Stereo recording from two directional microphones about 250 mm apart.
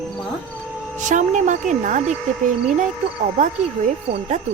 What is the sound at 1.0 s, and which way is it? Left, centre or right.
Speech, right.